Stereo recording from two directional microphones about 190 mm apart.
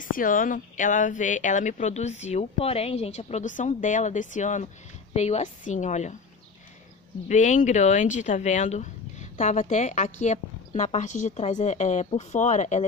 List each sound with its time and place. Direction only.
0.0 s speech: 45° left (ahead or behind)
7.2 s speech: 40° left (ahead or behind)